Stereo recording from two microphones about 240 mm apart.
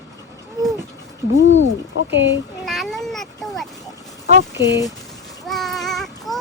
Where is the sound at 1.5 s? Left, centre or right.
Left.